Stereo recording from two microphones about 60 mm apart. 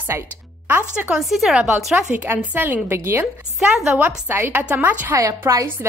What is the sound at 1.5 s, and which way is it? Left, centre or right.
Speech, centre.